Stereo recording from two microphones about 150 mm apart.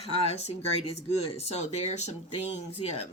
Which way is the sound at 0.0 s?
45° left (ahead or behind).